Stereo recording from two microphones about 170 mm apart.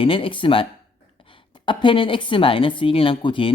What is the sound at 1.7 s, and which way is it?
A woman's voice, 30° left (ahead or behind).